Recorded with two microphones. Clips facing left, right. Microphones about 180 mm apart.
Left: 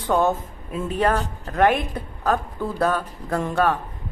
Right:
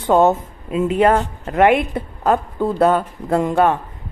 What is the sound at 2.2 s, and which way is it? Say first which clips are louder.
Speech: right 6 dB; 20° right (ahead or behind).